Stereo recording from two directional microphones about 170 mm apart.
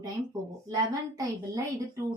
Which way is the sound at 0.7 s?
20° right (ahead or behind).